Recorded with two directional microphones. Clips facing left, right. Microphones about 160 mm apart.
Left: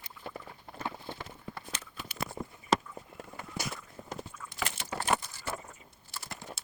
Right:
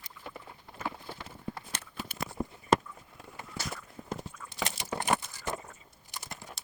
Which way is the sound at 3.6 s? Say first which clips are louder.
Left 2 dB; 15° left (ahead or behind).